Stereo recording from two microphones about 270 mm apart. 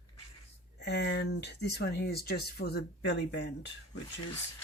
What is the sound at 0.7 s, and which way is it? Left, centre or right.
Speech, left.